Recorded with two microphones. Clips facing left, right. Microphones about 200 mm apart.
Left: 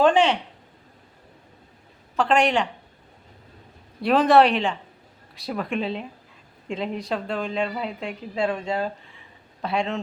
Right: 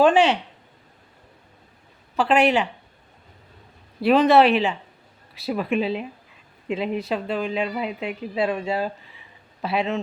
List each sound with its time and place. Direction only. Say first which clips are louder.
0.0 s speech: right 2 dB; 10° right (ahead or behind)
2.1 s a woman's voice: right 2 dB; 5° right (ahead or behind)
4.0 s a woman's voice: right 1 dB; centre (ahead or behind)